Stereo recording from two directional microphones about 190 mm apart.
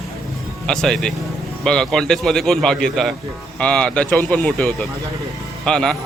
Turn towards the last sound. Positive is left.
turn(degrees=5)  # may be behind; listen again after turning